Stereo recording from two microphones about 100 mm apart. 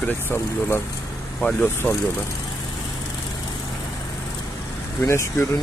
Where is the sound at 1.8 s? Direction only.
25° left (ahead or behind).